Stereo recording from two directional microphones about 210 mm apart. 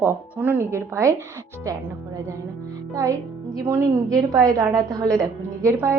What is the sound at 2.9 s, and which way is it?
Speech, 15° right (ahead or behind).